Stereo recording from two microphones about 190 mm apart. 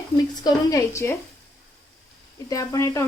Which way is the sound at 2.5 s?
20° left (ahead or behind).